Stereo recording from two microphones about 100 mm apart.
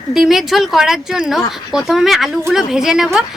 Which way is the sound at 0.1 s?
5° right (ahead or behind).